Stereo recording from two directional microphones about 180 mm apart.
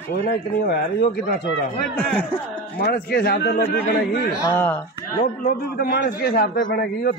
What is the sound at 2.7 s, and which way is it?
Speech, 55° left (ahead or behind).